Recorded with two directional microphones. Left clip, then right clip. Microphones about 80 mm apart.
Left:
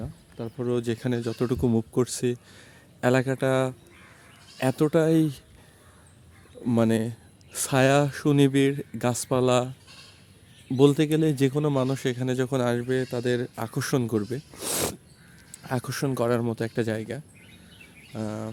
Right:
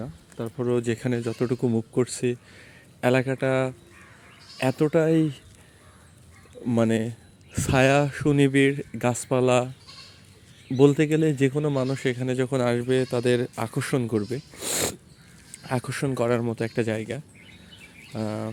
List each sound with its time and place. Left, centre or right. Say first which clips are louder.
0.7 s speech: right 2 dB; centre
1.4 s speech: left 1 dB; left
6.7 s speech: right 1 dB; left
10.8 s speech: right 1 dB; left
12.8 s a man's voice: right 4 dB; centre
13.7 s speech: left 1 dB; left
14.5 s a sound: right 1 dB; left
15.6 s speech: right 1 dB; left
18.1 s a man's voice: right 3 dB; centre